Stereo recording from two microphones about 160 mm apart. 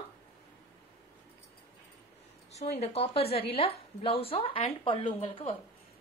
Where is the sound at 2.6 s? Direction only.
45° left (ahead or behind).